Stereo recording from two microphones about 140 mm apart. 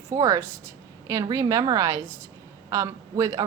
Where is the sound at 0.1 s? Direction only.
25° right (ahead or behind).